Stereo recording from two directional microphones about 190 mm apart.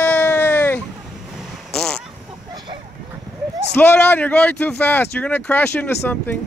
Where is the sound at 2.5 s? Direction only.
25° right (ahead or behind).